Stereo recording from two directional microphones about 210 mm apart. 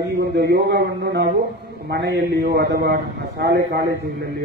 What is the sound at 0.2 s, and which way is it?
A man's voice, 50° right (ahead or behind).